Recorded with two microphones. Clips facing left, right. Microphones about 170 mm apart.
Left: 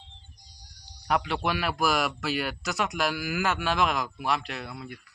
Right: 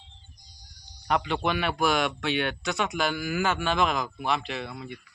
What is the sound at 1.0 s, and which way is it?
Speech, 5° left (ahead or behind).